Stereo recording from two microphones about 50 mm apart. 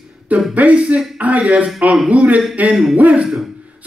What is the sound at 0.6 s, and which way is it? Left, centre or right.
Speech, right.